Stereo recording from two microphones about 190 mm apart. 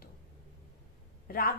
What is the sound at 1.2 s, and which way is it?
Speech, 50° left (ahead or behind).